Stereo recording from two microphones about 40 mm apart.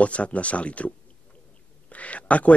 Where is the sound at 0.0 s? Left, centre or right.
Left.